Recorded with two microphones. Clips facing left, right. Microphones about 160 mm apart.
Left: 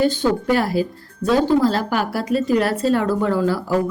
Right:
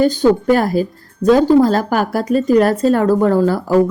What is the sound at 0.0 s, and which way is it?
A woman's voice, 45° right (ahead or behind).